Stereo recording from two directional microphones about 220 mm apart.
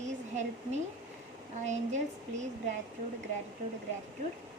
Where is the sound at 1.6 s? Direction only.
30° right (ahead or behind).